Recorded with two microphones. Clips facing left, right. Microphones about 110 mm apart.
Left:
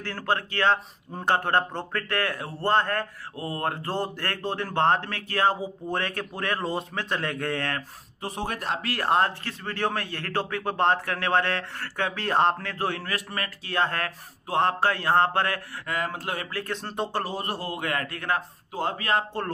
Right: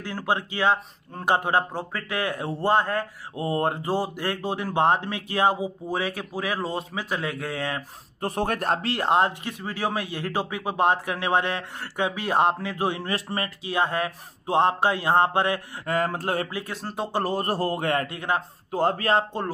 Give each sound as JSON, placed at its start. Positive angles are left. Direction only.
{"t": 0.0, "sound": "speech", "side_deg": -15}
{"t": 3.3, "sound": "mantra", "side_deg": -25}
{"t": 3.9, "sound": "speech", "side_deg": -10}
{"t": 8.2, "sound": "a man's voice", "side_deg": -55}
{"t": 8.8, "sound": "speech", "side_deg": -20}
{"t": 13.1, "sound": "mantra", "side_deg": -30}
{"t": 13.7, "sound": "speech", "side_deg": -15}
{"t": 15.9, "sound": "a man's voice", "side_deg": -40}
{"t": 16.4, "sound": "speech", "side_deg": -10}
{"t": 17.2, "sound": "a man's voice", "side_deg": -45}
{"t": 18.0, "sound": "mantra", "side_deg": -20}
{"t": 18.7, "sound": "a man's voice", "side_deg": -40}